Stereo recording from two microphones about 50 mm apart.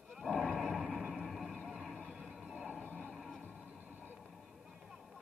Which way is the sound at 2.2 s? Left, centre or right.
Centre.